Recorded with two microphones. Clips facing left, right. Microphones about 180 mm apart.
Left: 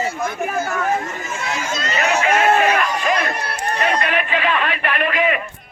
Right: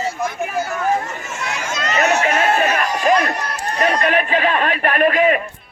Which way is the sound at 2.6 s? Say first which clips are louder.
Left 1 dB; 40° right (ahead or behind).